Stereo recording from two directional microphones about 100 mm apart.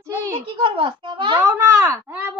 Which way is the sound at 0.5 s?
55° right (ahead or behind).